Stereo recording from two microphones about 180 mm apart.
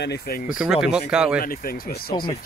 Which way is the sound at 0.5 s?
5° right (ahead or behind).